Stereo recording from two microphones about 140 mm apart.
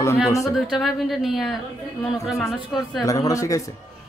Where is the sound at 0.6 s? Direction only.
Centre (ahead or behind).